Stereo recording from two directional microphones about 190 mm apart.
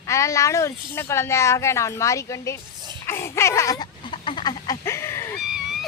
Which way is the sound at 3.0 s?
15° left (ahead or behind).